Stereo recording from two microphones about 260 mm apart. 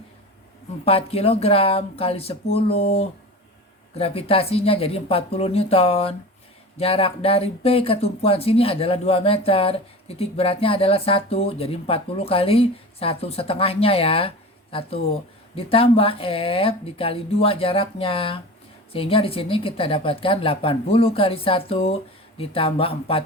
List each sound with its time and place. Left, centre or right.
0.9 s speech: left